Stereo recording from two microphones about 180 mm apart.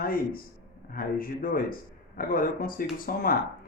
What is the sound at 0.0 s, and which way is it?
A man's voice, 55° left (ahead or behind).